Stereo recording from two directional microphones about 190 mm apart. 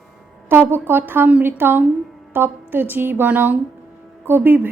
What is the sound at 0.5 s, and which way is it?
A woman's voice, 10° right (ahead or behind).